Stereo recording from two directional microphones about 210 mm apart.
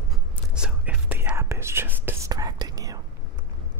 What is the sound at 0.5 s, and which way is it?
Whispering, 5° right (ahead or behind).